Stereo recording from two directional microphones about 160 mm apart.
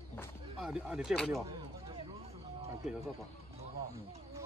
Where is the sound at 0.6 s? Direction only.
5° right (ahead or behind).